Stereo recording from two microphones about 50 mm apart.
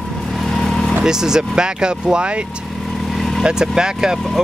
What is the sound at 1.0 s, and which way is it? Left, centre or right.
Speech, centre.